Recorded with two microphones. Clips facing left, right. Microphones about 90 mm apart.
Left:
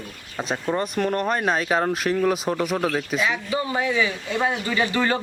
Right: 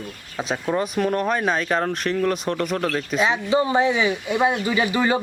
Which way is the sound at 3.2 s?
25° right (ahead or behind).